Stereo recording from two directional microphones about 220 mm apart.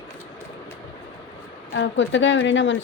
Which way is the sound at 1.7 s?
55° left (ahead or behind).